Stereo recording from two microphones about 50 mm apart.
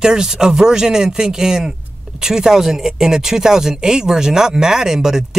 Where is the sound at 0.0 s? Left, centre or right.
Centre.